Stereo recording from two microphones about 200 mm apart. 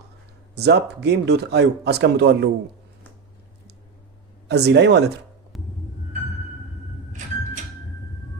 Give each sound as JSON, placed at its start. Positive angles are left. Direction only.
{"t": 0.5, "sound": "speech", "side_deg": -55}
{"t": 4.4, "sound": "speech", "side_deg": -55}
{"t": 5.5, "sound": "music", "side_deg": 0}